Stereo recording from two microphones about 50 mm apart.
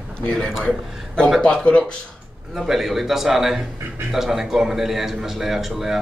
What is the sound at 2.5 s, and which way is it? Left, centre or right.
Speech, centre.